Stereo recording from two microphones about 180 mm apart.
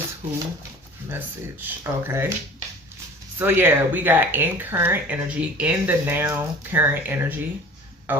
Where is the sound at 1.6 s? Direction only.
15° right (ahead or behind).